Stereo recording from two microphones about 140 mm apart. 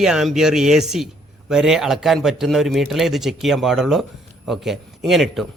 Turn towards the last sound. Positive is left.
turn(degrees=0)  # may be behind; listen again after turning